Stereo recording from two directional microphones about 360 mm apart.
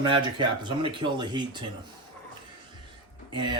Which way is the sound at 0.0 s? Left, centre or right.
Centre.